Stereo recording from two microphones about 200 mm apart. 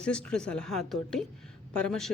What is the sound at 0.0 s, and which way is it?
Speech, 5° left (ahead or behind).